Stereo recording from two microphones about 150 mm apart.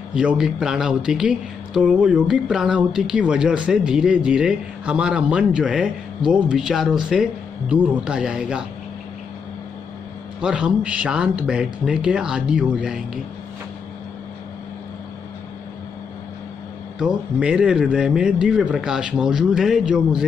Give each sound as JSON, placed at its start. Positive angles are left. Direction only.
{"t": 0.1, "sound": "speech", "side_deg": -5}
{"t": 10.4, "sound": "speech", "side_deg": -5}
{"t": 17.0, "sound": "speech", "side_deg": -5}